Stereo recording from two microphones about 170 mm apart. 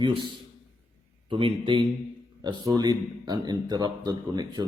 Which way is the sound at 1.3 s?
30° right (ahead or behind).